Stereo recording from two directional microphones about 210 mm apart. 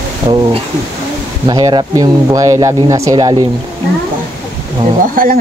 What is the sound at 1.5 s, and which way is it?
Speech, 20° right (ahead or behind).